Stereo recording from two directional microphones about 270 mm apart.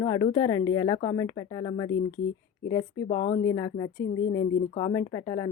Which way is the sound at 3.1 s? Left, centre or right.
Left.